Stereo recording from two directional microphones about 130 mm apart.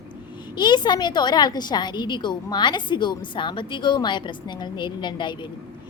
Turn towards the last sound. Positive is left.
turn(degrees=35)  # may be behind; listen again after turning